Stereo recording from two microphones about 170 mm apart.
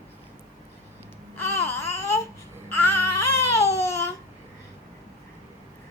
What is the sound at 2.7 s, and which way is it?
Babbling, 15° left (ahead or behind).